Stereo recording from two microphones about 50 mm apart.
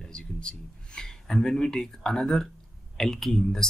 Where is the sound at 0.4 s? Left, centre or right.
Centre.